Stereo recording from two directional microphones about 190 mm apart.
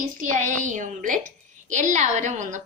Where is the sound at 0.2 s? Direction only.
45° right (ahead or behind).